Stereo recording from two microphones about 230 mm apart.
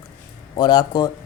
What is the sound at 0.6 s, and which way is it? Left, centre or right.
Speech, centre.